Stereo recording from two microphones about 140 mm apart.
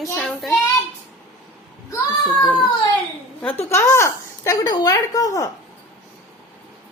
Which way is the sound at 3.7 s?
15° left (ahead or behind).